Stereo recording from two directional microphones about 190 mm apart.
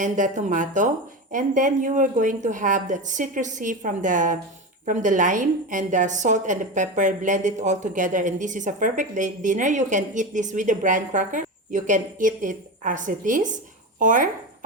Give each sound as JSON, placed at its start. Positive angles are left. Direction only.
{"t": 0.0, "sound": "a woman's voice", "side_deg": -40}